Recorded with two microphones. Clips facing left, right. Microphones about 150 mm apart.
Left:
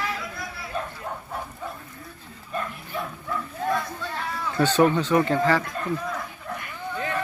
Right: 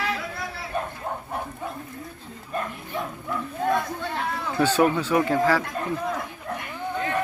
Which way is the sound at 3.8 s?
55° right (ahead or behind).